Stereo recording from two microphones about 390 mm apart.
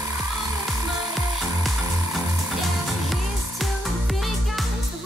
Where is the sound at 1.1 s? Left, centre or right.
Centre.